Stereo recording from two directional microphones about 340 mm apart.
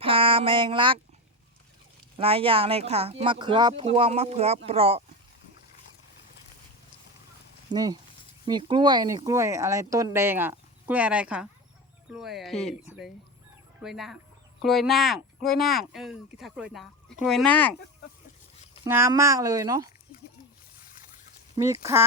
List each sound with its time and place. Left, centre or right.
0.0 s a sound: centre
2.1 s speech: centre
7.7 s speech: centre
18.9 s speech: centre
21.5 s speech: centre